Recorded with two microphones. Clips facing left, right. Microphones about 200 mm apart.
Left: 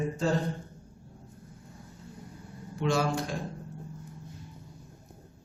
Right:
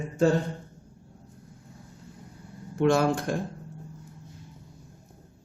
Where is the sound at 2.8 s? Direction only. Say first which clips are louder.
Right 6 dB; 55° right (ahead or behind).